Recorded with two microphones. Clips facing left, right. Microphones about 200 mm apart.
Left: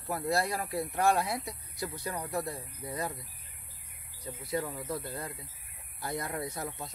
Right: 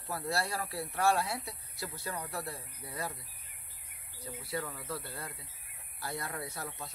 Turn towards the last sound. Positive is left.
turn(degrees=20)  # may be behind; listen again after turning